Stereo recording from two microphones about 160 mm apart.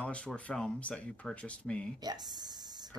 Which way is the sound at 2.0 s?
25° right (ahead or behind).